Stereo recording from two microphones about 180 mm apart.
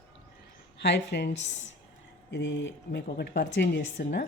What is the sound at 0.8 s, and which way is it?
A woman's voice, 70° left (ahead or behind).